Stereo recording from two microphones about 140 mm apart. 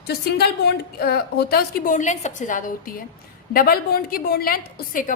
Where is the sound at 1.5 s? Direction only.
85° left; by 2.9 s 70° left (ahead or behind).